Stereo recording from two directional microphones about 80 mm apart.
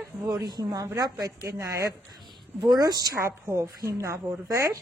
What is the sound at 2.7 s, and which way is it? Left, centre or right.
Speech, right.